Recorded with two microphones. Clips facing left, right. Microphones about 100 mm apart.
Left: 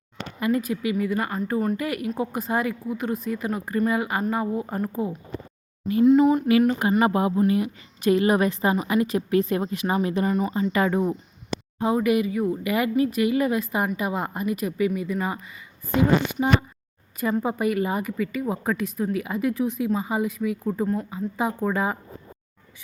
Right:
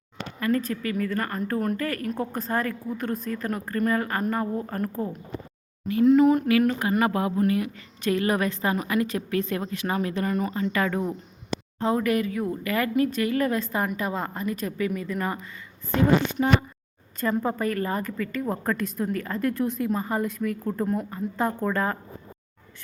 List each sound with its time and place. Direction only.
0.3 s a woman's voice: 15° left (ahead or behind)